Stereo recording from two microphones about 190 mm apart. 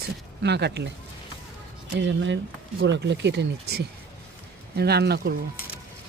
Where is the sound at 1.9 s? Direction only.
70° right (ahead or behind).